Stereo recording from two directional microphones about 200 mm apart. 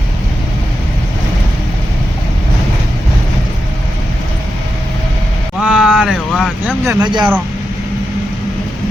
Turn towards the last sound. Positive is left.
turn(degrees=-20)  # may be behind; listen again after turning